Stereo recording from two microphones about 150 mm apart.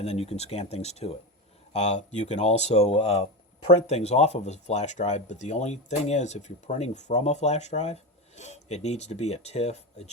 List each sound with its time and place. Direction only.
0.0 s speech: 45° left (ahead or behind)